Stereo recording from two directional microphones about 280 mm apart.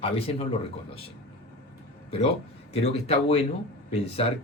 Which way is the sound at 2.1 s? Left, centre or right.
Centre.